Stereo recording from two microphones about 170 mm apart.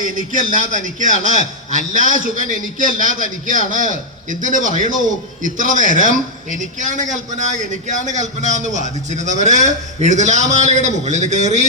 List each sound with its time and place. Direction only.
0.0 s a man's voice: 50° right (ahead or behind)